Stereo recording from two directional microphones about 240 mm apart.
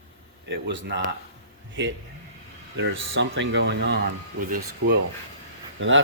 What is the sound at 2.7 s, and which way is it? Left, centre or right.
Speech, right.